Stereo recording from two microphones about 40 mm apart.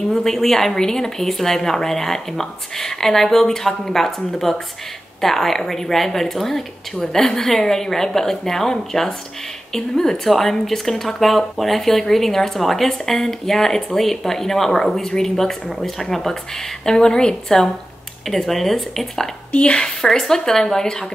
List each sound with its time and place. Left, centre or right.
0.1 s speech: centre
19.5 s a woman's voice: left
20.0 s speech: centre